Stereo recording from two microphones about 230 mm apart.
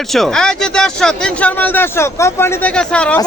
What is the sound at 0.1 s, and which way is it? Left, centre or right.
Speech, centre.